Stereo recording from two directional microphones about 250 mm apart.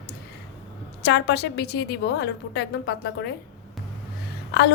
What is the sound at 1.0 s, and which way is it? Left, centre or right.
A woman's voice, left.